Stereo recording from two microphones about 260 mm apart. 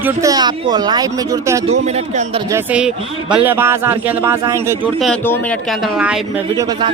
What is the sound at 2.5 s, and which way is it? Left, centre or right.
Speech, centre.